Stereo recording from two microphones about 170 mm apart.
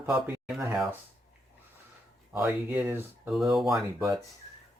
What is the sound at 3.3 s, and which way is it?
Speech, centre (ahead or behind).